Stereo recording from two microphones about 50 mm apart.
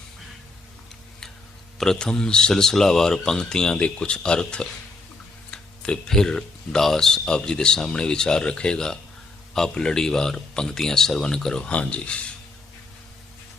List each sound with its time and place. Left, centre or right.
1.8 s speech: centre
5.5 s a sound: centre
6.1 s speech: centre